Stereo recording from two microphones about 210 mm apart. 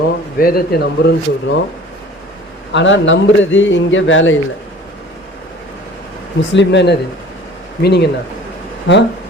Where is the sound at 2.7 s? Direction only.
60° left (ahead or behind).